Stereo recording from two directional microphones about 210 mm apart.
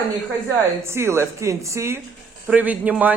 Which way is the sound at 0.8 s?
10° right (ahead or behind).